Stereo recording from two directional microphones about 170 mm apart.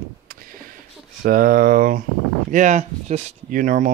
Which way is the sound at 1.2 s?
55° right (ahead or behind).